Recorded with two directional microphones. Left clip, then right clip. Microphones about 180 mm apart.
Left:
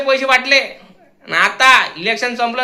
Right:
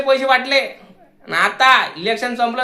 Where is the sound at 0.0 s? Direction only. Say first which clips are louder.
Left 1 dB; 15° left (ahead or behind).